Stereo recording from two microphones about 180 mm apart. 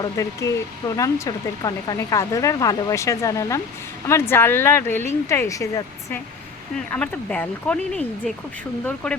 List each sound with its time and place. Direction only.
0.2 s speech: 15° left (ahead or behind)